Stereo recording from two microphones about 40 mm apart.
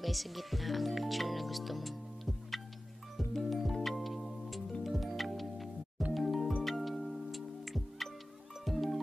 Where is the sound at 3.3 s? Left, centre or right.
Centre.